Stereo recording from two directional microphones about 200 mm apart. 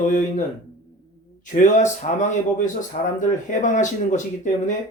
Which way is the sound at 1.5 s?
40° left (ahead or behind).